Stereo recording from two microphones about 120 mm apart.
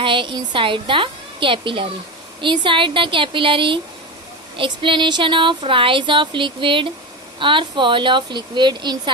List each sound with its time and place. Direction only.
0.0 s a woman's voice: 45° right (ahead or behind)